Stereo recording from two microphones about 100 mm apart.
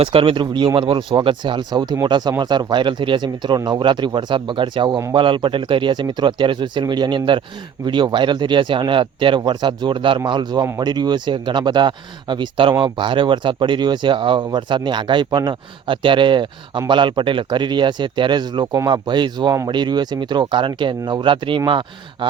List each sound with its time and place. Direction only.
0.0 s speech: 65° right (ahead or behind)